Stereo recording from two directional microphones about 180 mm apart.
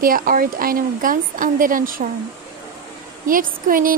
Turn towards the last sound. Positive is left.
turn(degrees=-50)  # may be behind; listen again after turning